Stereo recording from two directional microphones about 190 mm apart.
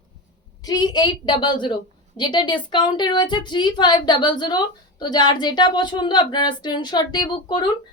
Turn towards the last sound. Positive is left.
turn(degrees=25)  # may be behind; listen again after turning